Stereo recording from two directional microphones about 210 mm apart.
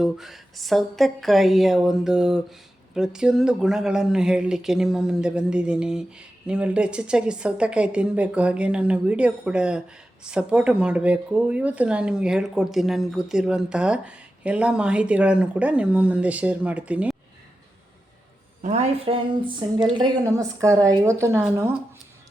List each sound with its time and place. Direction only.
0.0 s speech: centre (ahead or behind)
18.6 s a woman's voice: 35° right (ahead or behind); by 21.7 s 10° right (ahead or behind)